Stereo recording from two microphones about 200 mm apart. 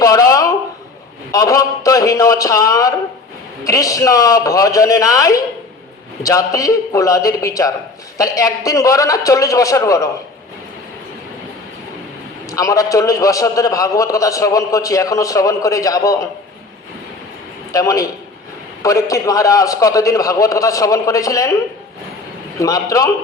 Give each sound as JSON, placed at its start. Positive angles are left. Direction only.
{"t": 0.0, "sound": "a sound", "side_deg": 15}
{"t": 1.3, "sound": "a man's voice", "side_deg": 15}
{"t": 12.5, "sound": "a man's voice", "side_deg": 15}
{"t": 17.7, "sound": "a man's voice", "side_deg": 15}
{"t": 22.5, "sound": "a man's voice", "side_deg": 15}